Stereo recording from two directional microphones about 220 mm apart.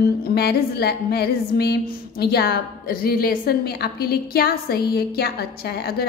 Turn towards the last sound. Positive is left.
turn(degrees=45)  # may be behind; listen again after turning